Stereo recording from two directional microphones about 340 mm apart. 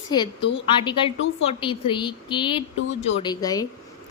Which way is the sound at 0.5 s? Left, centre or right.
Centre.